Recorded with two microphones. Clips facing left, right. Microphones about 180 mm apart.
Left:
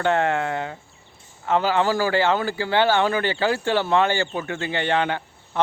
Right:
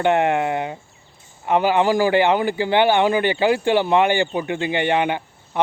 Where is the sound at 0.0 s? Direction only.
20° right (ahead or behind).